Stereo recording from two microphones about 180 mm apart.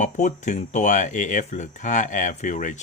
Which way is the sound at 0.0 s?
45° left (ahead or behind).